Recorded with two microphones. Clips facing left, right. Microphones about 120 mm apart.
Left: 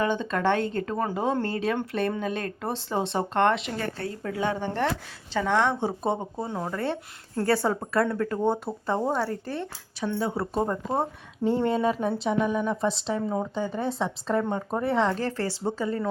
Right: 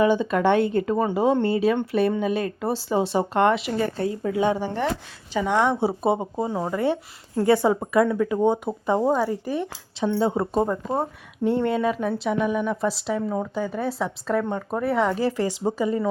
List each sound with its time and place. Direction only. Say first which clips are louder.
0.0 s speech: right 6 dB; 10° right (ahead or behind)
10.0 s speech: right 6 dB; 25° right (ahead or behind)
10.7 s a woman's voice: right 2 dB; centre (ahead or behind)
13.5 s a woman's voice: right 2 dB; 5° right (ahead or behind)